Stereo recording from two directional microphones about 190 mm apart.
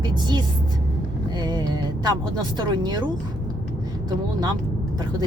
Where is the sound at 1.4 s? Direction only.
20° right (ahead or behind).